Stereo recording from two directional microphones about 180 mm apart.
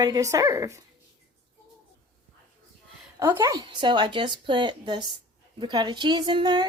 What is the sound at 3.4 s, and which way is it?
Speech, 20° right (ahead or behind).